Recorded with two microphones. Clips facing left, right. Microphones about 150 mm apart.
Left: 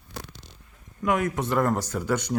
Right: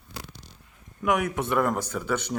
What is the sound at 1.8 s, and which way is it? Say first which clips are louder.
Speech: left 2 dB; 10° left (ahead or behind).